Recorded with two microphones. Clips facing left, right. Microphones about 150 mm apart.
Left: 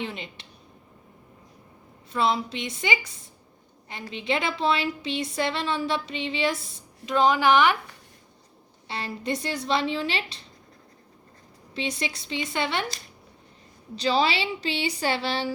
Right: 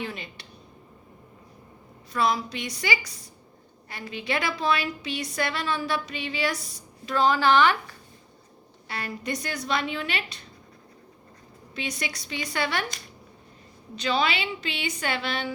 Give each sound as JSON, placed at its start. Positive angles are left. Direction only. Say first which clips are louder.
{"t": 0.0, "sound": "a woman's voice", "louder": "left 1 dB", "side_deg": 20}
{"t": 2.1, "sound": "a woman's voice", "louder": "left 1 dB", "side_deg": 25}
{"t": 8.9, "sound": "a woman's voice", "louder": "left 2 dB", "side_deg": 25}
{"t": 11.7, "sound": "a woman's voice", "louder": "left 3 dB", "side_deg": 25}
{"t": 13.9, "sound": "a woman's voice", "louder": "left 2 dB", "side_deg": 35}